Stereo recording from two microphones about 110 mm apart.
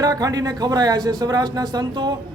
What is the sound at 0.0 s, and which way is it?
A man's voice, 35° right (ahead or behind).